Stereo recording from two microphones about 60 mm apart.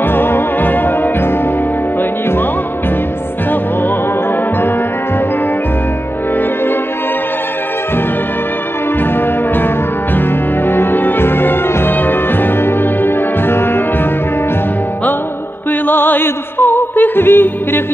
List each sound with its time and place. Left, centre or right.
0.1 s music: left
10.1 s music: left
15.9 s music: left